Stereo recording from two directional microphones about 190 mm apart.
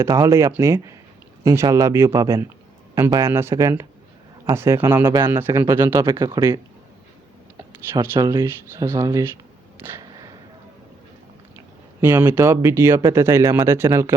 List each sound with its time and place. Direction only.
0.0 s speech: 15° right (ahead or behind)
7.9 s speech: 20° right (ahead or behind)
9.8 s a sound: 15° right (ahead or behind)
11.9 s speech: 10° right (ahead or behind)